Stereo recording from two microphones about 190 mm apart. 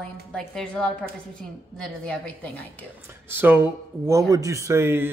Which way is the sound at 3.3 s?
10° right (ahead or behind).